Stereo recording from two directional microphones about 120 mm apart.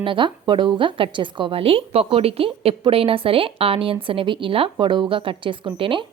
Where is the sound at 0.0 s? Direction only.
45° right (ahead or behind).